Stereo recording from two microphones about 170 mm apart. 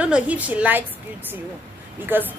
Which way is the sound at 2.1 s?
10° right (ahead or behind).